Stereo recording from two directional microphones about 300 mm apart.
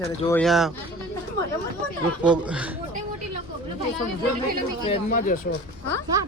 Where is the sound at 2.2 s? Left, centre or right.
Centre.